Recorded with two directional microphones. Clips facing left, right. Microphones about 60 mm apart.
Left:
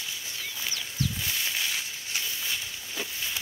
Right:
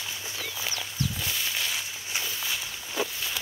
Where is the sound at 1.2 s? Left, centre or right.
Centre.